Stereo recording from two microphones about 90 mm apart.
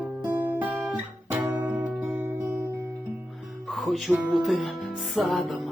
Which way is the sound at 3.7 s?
Centre (ahead or behind).